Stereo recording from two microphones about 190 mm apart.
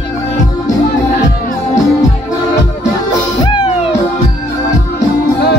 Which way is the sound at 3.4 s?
25° left (ahead or behind).